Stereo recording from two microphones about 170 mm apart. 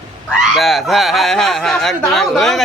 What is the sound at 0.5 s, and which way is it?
Speech, centre (ahead or behind).